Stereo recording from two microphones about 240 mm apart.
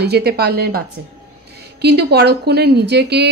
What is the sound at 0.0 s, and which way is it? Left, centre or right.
A woman's voice, right.